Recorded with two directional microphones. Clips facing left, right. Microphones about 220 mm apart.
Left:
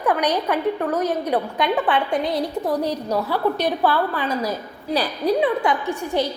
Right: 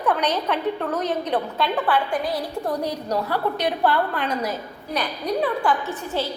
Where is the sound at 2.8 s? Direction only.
10° left (ahead or behind).